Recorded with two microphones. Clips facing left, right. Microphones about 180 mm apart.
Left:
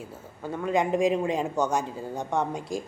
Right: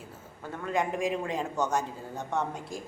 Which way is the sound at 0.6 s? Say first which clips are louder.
Left 6 dB; 15° left (ahead or behind).